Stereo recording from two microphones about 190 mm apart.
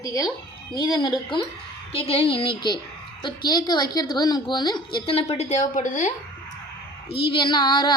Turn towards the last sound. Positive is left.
turn(degrees=25)  # may be behind; listen again after turning